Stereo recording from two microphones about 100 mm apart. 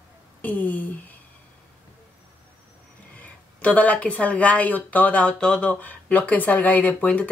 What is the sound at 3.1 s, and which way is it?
Speech, 15° left (ahead or behind).